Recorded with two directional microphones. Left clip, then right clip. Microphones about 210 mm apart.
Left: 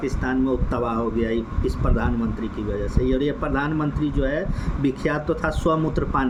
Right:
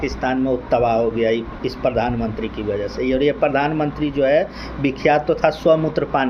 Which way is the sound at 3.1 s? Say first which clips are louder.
Right 8 dB; 20° left (ahead or behind).